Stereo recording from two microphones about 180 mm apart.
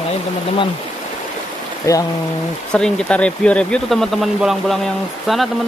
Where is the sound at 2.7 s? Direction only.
5° left (ahead or behind).